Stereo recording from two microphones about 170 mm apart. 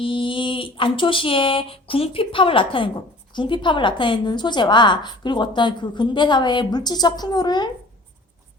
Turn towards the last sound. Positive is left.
turn(degrees=25)  # may be behind; listen again after turning